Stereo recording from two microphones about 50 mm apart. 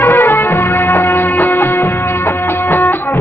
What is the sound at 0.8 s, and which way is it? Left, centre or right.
Music, left.